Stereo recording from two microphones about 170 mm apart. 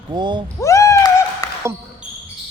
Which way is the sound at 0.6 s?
20° left (ahead or behind).